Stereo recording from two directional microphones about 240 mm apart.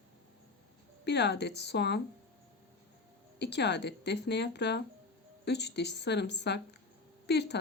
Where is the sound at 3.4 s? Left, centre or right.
Left.